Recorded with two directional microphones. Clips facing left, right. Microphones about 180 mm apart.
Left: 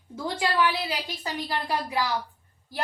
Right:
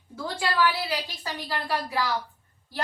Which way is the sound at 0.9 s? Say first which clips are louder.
Even; 20° left (ahead or behind).